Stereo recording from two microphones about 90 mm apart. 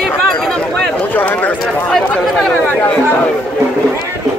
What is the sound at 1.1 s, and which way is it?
Speech, 20° left (ahead or behind).